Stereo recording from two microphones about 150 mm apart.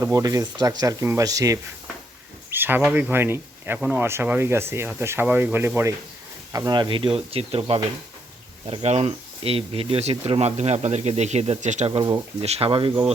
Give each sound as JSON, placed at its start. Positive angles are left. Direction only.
{"t": 0.0, "sound": "speech", "side_deg": -25}
{"t": 11.9, "sound": "speech", "side_deg": -30}